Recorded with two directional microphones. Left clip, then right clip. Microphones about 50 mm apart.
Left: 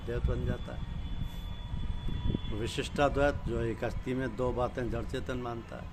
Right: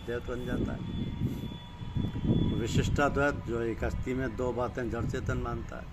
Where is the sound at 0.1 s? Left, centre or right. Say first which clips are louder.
Right 2 dB; left.